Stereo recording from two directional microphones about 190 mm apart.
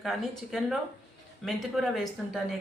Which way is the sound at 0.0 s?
Centre (ahead or behind).